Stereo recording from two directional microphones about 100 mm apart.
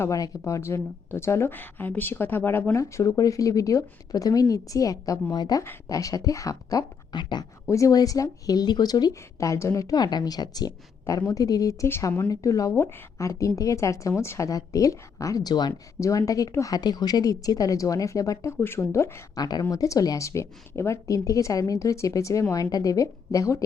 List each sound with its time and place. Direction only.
0.0 s speech: 30° left (ahead or behind)
7.7 s speech: 35° left (ahead or behind)
19.4 s a woman's voice: 45° left (ahead or behind)